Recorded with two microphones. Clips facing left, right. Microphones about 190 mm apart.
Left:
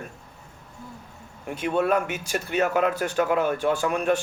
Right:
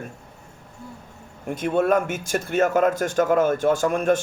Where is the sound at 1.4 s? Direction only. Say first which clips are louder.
Right 3 dB; 50° right (ahead or behind).